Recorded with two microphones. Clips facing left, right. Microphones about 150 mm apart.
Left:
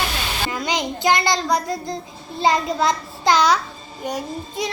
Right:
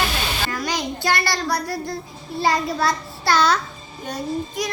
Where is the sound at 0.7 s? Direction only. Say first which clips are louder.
Left 5 dB; 20° left (ahead or behind).